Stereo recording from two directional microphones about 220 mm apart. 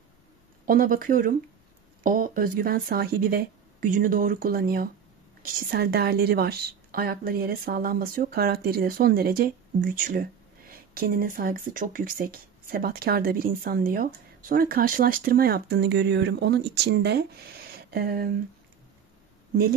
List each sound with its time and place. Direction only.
0.7 s speech: 40° right (ahead or behind)